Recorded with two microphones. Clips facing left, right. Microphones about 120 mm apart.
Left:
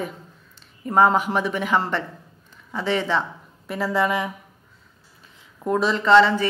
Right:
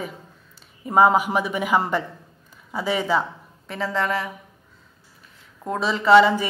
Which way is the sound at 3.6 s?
5° left (ahead or behind).